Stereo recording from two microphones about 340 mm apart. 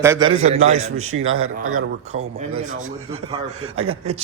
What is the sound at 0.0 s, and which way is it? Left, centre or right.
Speech, centre.